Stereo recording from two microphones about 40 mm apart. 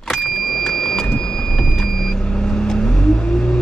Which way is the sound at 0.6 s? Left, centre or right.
Centre.